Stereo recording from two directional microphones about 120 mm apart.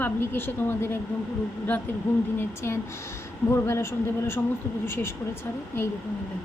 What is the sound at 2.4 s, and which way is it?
A woman's voice, 20° left (ahead or behind).